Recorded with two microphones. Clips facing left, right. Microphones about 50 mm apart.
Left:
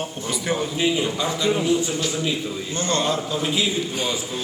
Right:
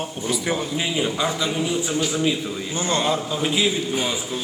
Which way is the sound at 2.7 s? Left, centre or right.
Centre.